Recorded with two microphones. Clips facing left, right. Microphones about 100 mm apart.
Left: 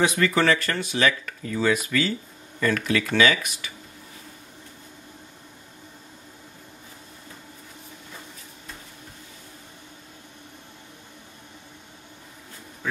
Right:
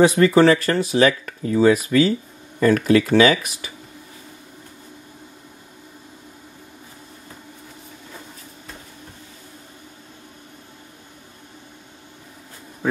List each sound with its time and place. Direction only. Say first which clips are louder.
0.0 s speech: right 8 dB; 35° right (ahead or behind)